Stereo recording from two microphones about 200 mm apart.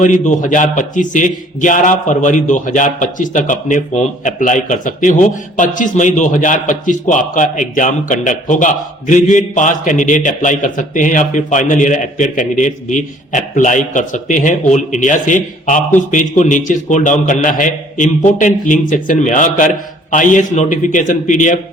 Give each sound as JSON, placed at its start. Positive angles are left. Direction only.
{"t": 0.0, "sound": "a man's voice", "side_deg": 40}